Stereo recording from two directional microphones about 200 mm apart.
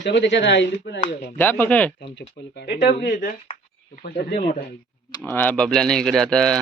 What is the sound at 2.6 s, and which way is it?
Speech, 55° left (ahead or behind).